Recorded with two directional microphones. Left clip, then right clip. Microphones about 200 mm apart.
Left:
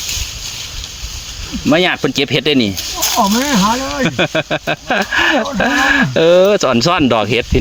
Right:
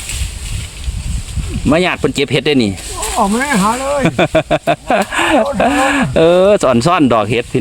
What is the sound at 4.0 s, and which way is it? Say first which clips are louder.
Speech: right 3 dB; 25° right (ahead or behind).